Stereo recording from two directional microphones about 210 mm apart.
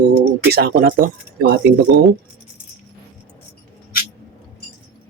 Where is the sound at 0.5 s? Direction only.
45° right (ahead or behind).